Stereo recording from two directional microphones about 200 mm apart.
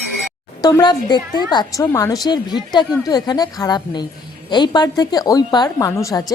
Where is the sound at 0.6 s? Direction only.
20° left (ahead or behind).